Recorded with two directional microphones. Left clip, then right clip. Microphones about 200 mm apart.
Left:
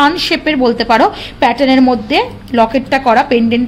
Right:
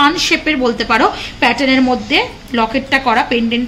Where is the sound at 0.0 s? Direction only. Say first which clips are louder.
Left 1 dB; 50° left (ahead or behind).